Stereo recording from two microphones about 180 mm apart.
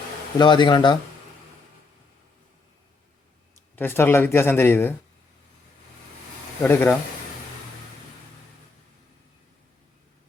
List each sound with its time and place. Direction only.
0.3 s speech: 25° left (ahead or behind)
3.8 s speech: 10° left (ahead or behind)
6.6 s speech: 10° left (ahead or behind)